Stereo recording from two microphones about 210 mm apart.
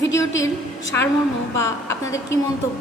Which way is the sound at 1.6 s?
15° left (ahead or behind).